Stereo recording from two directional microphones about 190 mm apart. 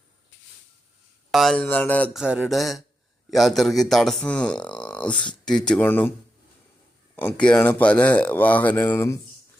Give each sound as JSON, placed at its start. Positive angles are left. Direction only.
{"t": 1.3, "sound": "speech", "side_deg": 0}
{"t": 2.2, "sound": "speech", "side_deg": -5}
{"t": 7.2, "sound": "speech", "side_deg": 10}